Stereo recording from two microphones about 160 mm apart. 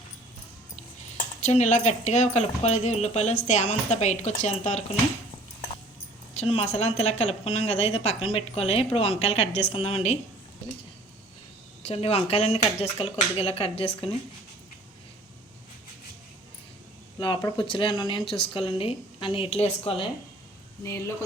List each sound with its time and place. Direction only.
1.4 s speech: 45° left (ahead or behind)
6.3 s speech: 40° left (ahead or behind)
11.8 s speech: 40° left (ahead or behind)
17.2 s speech: 30° left (ahead or behind)